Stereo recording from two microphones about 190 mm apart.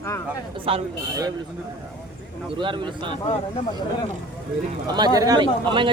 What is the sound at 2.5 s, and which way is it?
Speech, 25° right (ahead or behind).